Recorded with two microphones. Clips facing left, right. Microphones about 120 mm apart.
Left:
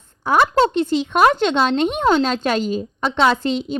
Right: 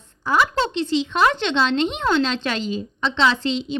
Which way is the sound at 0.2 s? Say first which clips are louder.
Left 5 dB; 55° left (ahead or behind).